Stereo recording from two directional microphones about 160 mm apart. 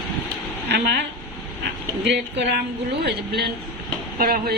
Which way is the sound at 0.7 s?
90° right.